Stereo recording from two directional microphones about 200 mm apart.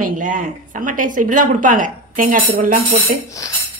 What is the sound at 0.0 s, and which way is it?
A woman's voice, 40° right (ahead or behind).